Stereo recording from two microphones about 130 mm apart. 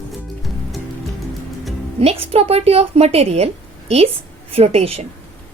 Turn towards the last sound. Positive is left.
turn(degrees=-50)  # may be behind; listen again after turning